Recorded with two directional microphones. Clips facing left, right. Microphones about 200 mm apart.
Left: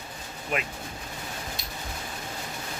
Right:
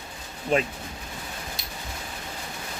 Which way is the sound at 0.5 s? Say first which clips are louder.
Right 7 dB; 30° right (ahead or behind).